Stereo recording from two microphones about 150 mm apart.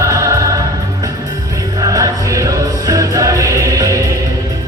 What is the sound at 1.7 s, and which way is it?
Music, 25° right (ahead or behind).